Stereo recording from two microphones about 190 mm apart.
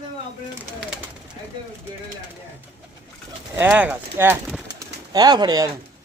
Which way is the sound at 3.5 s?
10° right (ahead or behind).